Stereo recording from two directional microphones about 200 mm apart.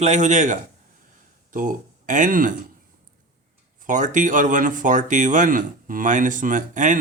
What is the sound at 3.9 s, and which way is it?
Speech, 40° right (ahead or behind).